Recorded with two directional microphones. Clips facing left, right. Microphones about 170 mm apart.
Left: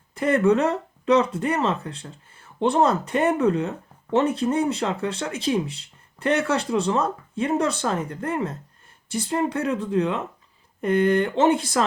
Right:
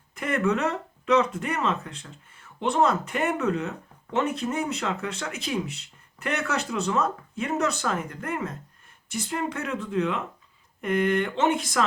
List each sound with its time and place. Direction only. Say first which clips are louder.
0.1 s speech: left 6 dB; 30° left (ahead or behind)